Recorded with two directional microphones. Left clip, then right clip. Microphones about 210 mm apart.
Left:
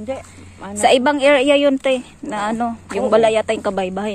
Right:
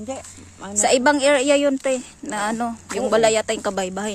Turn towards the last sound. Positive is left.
turn(degrees=-15)  # may be behind; listen again after turning